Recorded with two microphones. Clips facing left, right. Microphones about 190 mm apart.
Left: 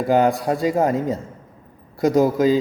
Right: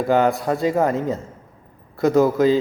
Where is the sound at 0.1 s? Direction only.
15° left (ahead or behind).